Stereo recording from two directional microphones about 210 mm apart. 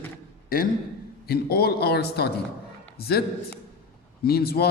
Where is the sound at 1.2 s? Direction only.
50° left (ahead or behind).